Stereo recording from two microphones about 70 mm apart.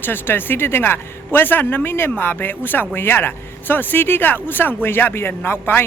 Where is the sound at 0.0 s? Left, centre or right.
Left.